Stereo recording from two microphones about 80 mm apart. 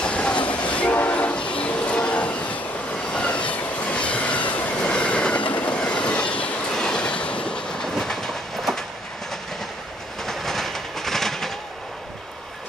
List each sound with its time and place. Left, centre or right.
0.0 s train: centre
10.2 s train: centre